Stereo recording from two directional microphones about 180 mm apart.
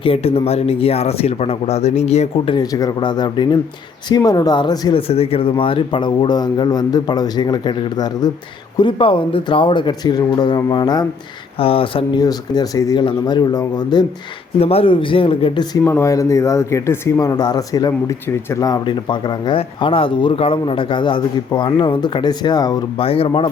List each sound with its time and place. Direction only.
0.0 s speech: 30° left (ahead or behind)
2.6 s speech: 20° left (ahead or behind)
14.6 s speech: 30° left (ahead or behind)
15.8 s speech: 15° left (ahead or behind)
23.0 s speech: 30° left (ahead or behind)